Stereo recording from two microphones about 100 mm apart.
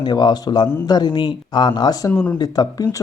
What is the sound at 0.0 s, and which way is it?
Speech, 45° left (ahead or behind).